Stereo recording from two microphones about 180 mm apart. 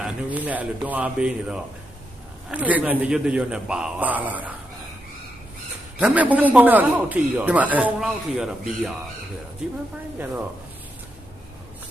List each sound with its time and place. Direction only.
0.0 s a man's voice: 10° right (ahead or behind)
6.0 s a man's voice: 10° right (ahead or behind)